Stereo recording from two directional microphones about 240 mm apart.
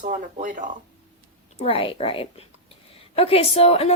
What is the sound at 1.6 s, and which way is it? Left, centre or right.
A woman's voice, left.